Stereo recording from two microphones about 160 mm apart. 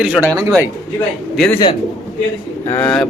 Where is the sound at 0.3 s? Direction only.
15° right (ahead or behind).